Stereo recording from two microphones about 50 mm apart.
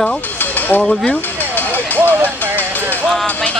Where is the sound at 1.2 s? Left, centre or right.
Left.